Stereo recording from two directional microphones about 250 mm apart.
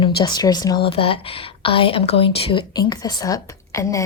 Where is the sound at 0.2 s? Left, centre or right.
Centre.